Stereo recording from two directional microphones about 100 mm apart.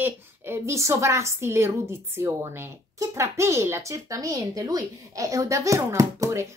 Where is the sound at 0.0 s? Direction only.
25° right (ahead or behind).